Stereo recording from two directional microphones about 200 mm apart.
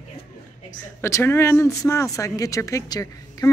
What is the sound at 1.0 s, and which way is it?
Speech, 10° left (ahead or behind).